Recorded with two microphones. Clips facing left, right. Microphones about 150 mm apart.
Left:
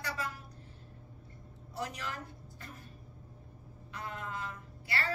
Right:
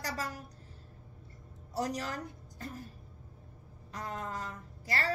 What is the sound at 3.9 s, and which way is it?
A woman's voice, 40° right (ahead or behind).